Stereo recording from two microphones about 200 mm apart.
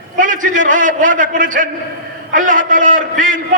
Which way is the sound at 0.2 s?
40° right (ahead or behind).